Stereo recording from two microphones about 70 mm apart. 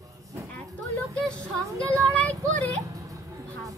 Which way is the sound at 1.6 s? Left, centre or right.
Right.